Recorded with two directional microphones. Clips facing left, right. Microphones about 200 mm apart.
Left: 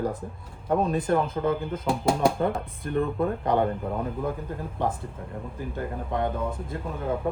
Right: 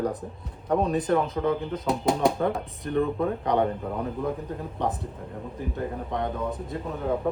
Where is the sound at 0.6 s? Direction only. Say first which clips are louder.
Even; centre (ahead or behind).